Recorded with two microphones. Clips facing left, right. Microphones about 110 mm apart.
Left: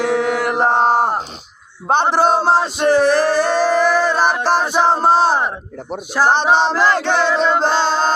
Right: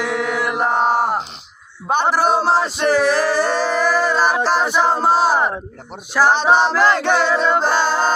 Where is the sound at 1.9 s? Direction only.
25° left (ahead or behind).